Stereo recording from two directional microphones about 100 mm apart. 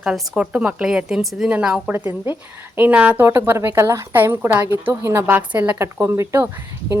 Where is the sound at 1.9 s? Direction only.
20° right (ahead or behind).